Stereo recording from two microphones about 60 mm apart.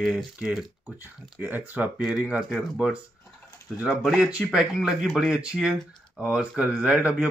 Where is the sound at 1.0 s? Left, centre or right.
Right.